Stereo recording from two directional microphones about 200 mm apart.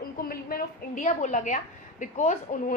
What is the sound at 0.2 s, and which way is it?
A woman's voice, 45° left (ahead or behind).